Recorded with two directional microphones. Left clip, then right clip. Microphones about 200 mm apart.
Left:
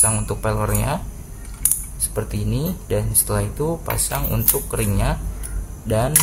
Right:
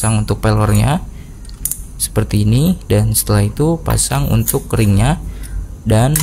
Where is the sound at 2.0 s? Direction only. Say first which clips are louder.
Right 9 dB; 40° right (ahead or behind).